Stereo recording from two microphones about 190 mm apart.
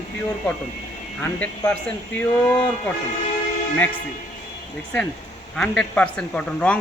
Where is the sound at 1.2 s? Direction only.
10° left (ahead or behind).